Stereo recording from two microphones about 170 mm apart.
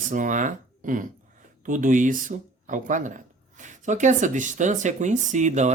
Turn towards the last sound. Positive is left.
turn(degrees=-45)  # may be behind; listen again after turning